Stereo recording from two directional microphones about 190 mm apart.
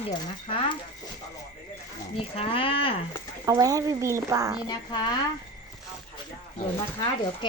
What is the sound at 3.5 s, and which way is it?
Speech, 20° right (ahead or behind).